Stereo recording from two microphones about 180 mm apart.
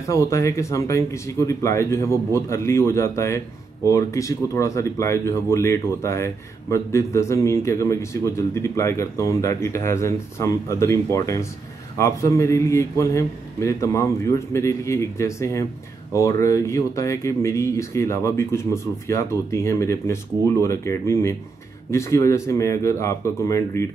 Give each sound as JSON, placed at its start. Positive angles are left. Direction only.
{"t": 0.1, "sound": "speech", "side_deg": 15}